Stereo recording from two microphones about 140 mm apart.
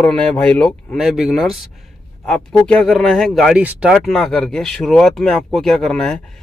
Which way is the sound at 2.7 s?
5° left (ahead or behind).